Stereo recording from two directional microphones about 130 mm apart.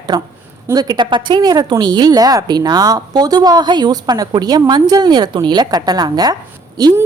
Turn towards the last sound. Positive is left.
turn(degrees=-30)  # may be behind; listen again after turning